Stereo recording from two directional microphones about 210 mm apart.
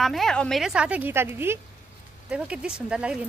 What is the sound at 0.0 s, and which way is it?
A woman's voice, centre (ahead or behind).